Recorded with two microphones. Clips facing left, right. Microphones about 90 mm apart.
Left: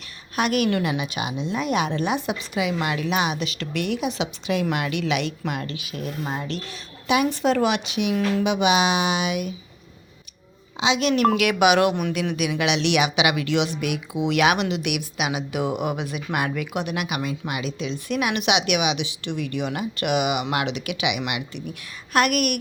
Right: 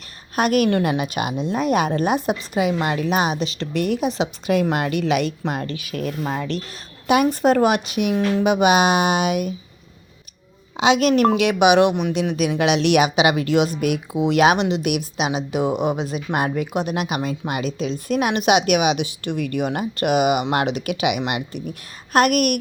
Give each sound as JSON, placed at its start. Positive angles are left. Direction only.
{"t": 0.3, "sound": "speech", "side_deg": -45}
{"t": 10.8, "sound": "a woman's voice", "side_deg": -55}
{"t": 11.3, "sound": "speech", "side_deg": -25}
{"t": 12.4, "sound": "speech", "side_deg": -40}